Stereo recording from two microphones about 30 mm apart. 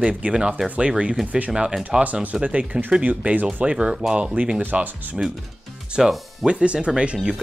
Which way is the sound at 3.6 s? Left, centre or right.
Right.